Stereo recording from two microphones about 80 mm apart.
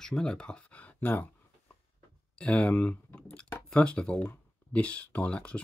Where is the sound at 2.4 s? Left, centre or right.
Centre.